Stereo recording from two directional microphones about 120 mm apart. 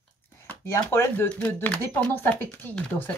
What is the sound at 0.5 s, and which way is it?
Speech, 20° left (ahead or behind).